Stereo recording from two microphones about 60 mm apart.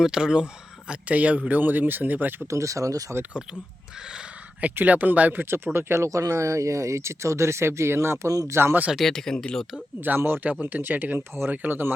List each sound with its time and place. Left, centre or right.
0.0 s speech: centre; by 2.5 s right
2.5 s speech: right
4.7 s speech: right
6.1 s speech: right
8.3 s speech: right
8.5 s speech: right
9.0 s speech: centre
10.2 s speech: right
10.4 s speech: right
11.2 s speech: right
11.5 s speech: right